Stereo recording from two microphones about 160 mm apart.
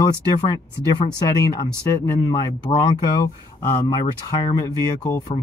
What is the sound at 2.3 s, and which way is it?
Speech, 25° left (ahead or behind).